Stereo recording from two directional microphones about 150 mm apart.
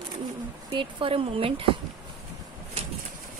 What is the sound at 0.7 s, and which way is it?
A woman's voice, 35° right (ahead or behind).